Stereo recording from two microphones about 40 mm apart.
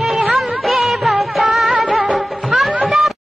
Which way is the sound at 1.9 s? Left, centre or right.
Centre.